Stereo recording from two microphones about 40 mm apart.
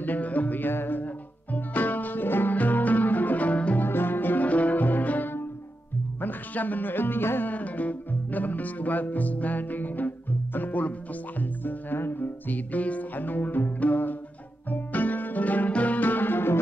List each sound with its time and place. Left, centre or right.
0.0 s music: left
0.7 s music: left
2.5 s music: left
3.8 s music: left
4.5 s music: left
6.2 s speech: left
7.4 s music: left
11.3 s music: left